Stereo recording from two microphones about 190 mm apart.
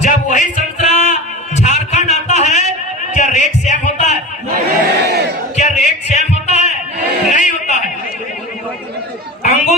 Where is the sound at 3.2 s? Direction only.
40° left (ahead or behind).